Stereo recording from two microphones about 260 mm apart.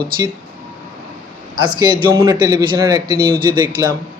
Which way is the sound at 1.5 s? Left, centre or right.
Centre.